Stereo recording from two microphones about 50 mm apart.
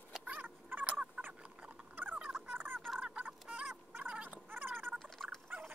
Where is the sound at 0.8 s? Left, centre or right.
Right.